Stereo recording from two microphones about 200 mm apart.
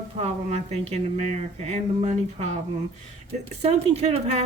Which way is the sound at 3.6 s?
30° right (ahead or behind).